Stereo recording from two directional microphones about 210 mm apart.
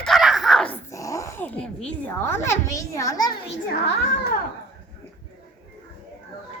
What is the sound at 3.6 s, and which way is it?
Speech, 50° left (ahead or behind).